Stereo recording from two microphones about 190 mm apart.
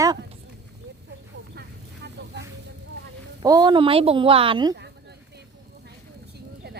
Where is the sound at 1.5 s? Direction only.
60° right (ahead or behind).